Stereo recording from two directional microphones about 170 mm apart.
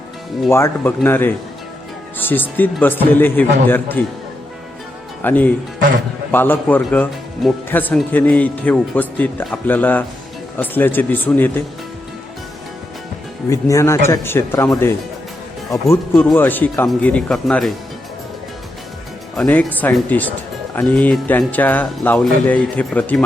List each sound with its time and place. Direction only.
0.5 s speech: 15° left (ahead or behind)
5.2 s speech: 10° left (ahead or behind)
13.5 s speech: 15° left (ahead or behind)
16.1 s speech: 10° left (ahead or behind)
19.4 s speech: 10° left (ahead or behind)